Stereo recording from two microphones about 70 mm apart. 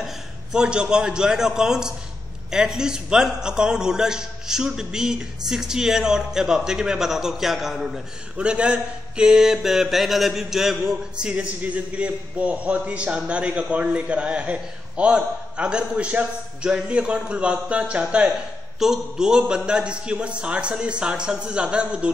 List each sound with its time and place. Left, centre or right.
0.0 s a man's voice: centre
18.8 s a man's voice: centre